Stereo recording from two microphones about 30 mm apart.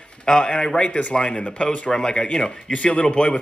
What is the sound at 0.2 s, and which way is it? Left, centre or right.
Speech, left.